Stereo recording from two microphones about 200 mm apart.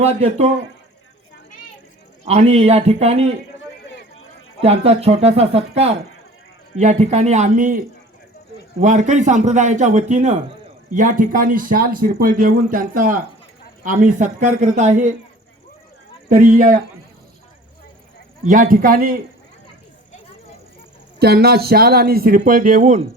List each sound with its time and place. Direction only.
0.0 s a man's voice: 30° right (ahead or behind)
2.2 s a man's voice: 30° right (ahead or behind)
3.8 s a sound: 65° left (ahead or behind)
4.6 s a man's voice: 30° right (ahead or behind)
16.3 s speech: 45° right (ahead or behind)
18.4 s speech: 45° right (ahead or behind)
21.2 s a man's voice: 55° right (ahead or behind); by 23.0 s 35° right (ahead or behind)